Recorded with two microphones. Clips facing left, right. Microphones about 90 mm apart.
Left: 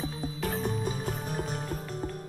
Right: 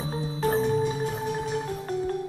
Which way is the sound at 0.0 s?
30° right (ahead or behind).